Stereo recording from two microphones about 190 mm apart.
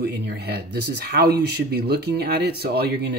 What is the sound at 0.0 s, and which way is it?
Speech, 55° right (ahead or behind).